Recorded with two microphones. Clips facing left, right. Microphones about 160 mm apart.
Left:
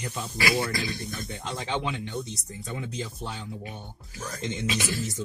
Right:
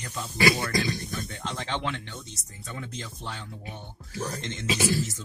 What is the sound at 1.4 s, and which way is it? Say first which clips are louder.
Speech: left 2 dB; 10° left (ahead or behind).